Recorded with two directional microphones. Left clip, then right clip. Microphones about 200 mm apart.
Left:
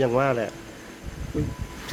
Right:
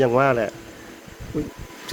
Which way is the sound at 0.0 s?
25° right (ahead or behind).